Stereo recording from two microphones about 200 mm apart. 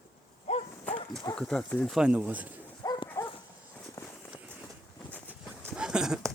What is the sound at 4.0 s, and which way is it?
Run, 15° left (ahead or behind).